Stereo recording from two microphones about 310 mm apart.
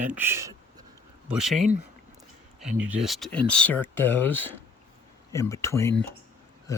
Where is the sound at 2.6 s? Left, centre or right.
Centre.